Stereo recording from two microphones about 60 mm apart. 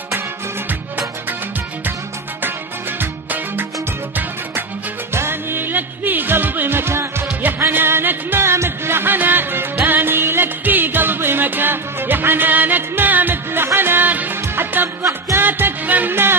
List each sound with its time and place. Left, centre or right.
3.0 s music: right
5.1 s music: right